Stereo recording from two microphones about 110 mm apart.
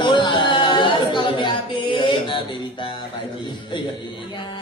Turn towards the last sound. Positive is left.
turn(degrees=45)  # may be behind; listen again after turning